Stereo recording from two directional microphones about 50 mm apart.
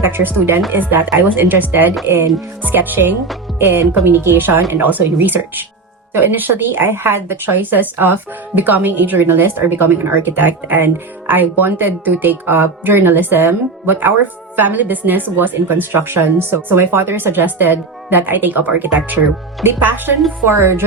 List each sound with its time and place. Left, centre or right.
0.0 s a woman's voice: right
6.2 s a woman's voice: right
19.6 s speech: right